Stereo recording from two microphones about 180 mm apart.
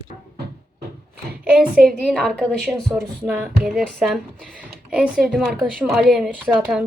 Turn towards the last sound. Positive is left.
turn(degrees=5)  # may be behind; listen again after turning